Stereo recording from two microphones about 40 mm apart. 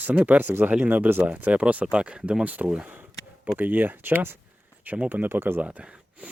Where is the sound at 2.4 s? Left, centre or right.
Right.